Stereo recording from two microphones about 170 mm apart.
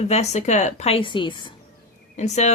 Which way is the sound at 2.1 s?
40° left (ahead or behind).